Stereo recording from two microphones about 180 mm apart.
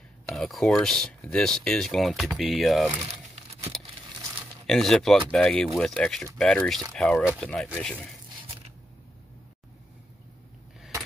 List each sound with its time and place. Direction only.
0.3 s speech: centre (ahead or behind)
4.6 s speech: centre (ahead or behind)